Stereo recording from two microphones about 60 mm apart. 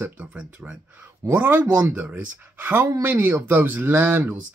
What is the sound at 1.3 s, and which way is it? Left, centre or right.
Speech, right.